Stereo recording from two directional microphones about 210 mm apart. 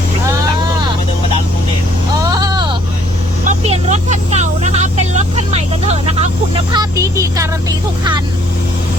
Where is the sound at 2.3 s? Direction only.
20° right (ahead or behind).